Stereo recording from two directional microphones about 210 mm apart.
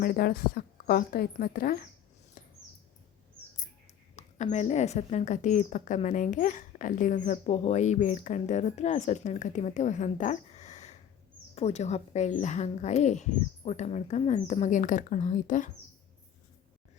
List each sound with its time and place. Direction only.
0.0 s speech: 45° left (ahead or behind)
4.1 s a sound: 30° left (ahead or behind)
4.5 s speech: 35° left (ahead or behind)